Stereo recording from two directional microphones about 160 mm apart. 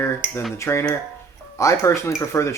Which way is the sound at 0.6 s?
15° left (ahead or behind).